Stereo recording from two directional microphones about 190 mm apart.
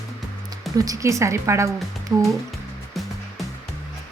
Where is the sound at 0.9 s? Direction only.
15° right (ahead or behind).